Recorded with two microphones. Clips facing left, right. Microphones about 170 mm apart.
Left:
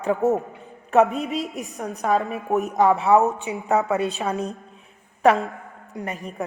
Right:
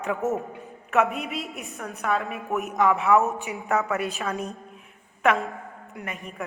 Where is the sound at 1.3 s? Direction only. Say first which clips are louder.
Left 6 dB; centre (ahead or behind).